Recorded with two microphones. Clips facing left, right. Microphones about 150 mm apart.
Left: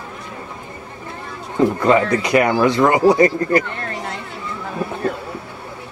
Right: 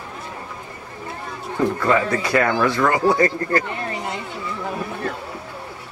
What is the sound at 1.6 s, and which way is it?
Speech, 20° left (ahead or behind).